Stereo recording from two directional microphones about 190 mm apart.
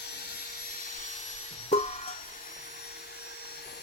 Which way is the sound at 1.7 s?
40° left (ahead or behind).